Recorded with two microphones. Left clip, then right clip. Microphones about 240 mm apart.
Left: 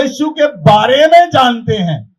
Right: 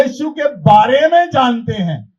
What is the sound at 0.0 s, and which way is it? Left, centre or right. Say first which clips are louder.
Speech: left 2 dB; left.